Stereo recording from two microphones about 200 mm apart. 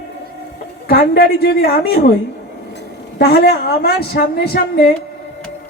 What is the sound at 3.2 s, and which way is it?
A woman's voice, 55° left (ahead or behind).